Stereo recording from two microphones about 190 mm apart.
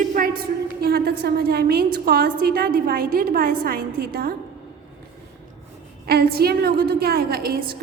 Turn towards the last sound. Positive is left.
turn(degrees=-55)  # may be behind; listen again after turning